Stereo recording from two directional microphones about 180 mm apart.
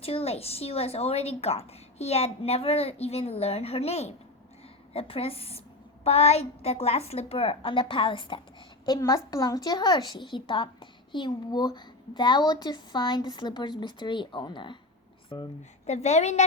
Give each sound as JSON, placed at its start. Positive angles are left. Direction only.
{"t": 0.0, "sound": "a woman's voice", "side_deg": 35}
{"t": 15.9, "sound": "a woman's voice", "side_deg": 40}